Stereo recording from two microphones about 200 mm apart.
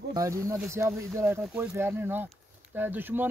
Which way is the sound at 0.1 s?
15° right (ahead or behind).